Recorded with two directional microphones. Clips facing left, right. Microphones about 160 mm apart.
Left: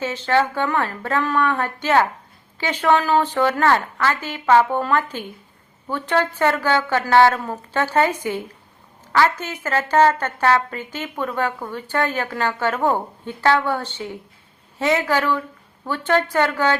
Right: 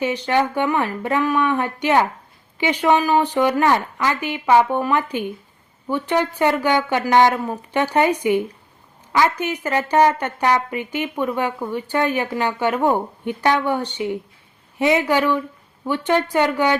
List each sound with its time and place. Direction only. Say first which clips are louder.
0.0 s a woman's voice: right 1 dB; 15° right (ahead or behind)